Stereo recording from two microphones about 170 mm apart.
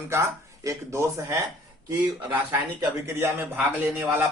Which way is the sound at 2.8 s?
15° right (ahead or behind).